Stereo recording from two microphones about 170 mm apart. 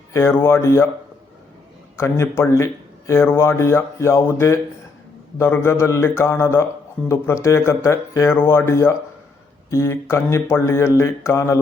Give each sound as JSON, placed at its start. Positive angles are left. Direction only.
{"t": 0.1, "sound": "speech", "side_deg": 15}
{"t": 2.0, "sound": "speech", "side_deg": 15}